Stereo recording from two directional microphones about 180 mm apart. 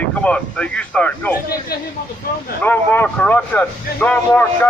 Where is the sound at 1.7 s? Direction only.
55° left (ahead or behind).